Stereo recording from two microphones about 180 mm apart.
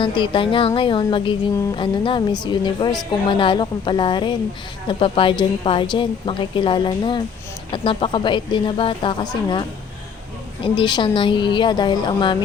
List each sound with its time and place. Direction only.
0.0 s speech: 30° left (ahead or behind)